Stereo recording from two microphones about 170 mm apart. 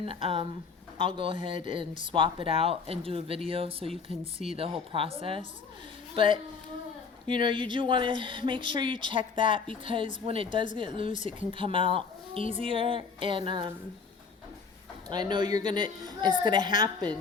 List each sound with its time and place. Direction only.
0.0 s a woman's voice: 30° right (ahead or behind)
11.1 s speech: 45° left (ahead or behind)
11.5 s speech: 30° right (ahead or behind)
15.1 s a woman's voice: 25° right (ahead or behind)